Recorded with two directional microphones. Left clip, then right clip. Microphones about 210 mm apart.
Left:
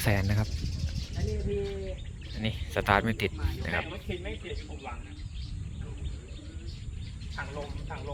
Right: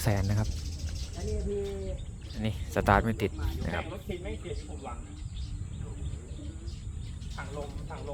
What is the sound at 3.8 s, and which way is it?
Speech, 15° right (ahead or behind).